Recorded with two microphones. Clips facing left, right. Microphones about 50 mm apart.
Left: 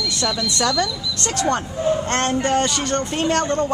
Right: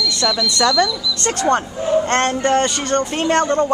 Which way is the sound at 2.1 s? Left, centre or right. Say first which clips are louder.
Right 3 dB; centre.